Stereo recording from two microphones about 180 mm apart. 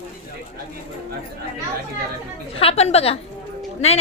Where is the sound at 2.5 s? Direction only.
35° left (ahead or behind).